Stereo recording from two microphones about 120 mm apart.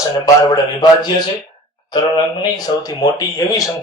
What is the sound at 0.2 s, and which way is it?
Speech, 35° left (ahead or behind).